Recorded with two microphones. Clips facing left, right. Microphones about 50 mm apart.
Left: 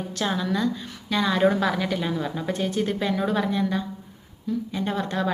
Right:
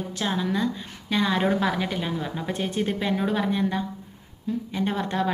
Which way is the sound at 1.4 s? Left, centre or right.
Centre.